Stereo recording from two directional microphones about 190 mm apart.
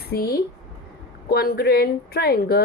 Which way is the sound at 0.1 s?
55° left (ahead or behind).